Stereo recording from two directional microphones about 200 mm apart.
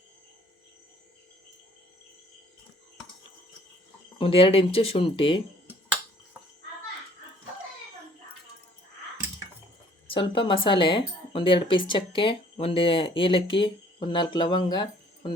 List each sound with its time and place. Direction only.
4.2 s speech: 25° left (ahead or behind)
10.1 s speech: 25° left (ahead or behind)